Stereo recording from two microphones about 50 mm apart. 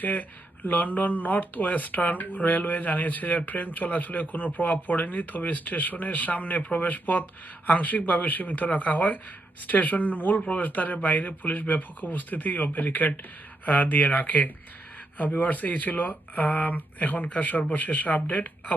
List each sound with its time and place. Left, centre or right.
0.0 s speech: left